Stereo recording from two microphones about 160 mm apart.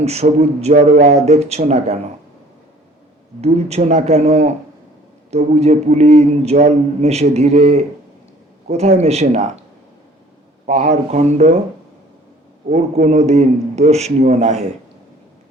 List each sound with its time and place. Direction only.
0.0 s speech: 40° right (ahead or behind)
3.4 s speech: 40° right (ahead or behind)
10.7 s speech: 45° right (ahead or behind)
12.7 s speech: 45° right (ahead or behind)